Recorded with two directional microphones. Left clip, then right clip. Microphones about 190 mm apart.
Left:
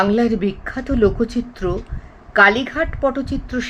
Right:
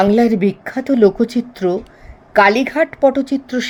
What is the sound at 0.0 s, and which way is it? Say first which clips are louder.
A woman's voice: right 4 dB; 40° right (ahead or behind).